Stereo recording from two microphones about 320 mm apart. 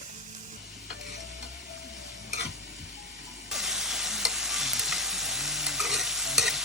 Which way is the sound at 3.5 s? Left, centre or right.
Centre.